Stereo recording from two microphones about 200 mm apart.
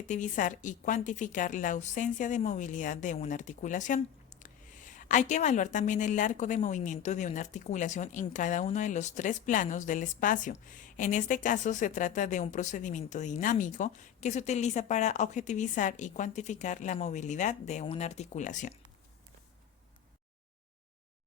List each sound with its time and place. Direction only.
0.1 s a woman's voice: 40° left (ahead or behind)